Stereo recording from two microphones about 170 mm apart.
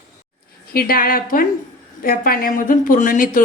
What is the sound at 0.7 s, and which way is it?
A woman's voice, 60° left (ahead or behind).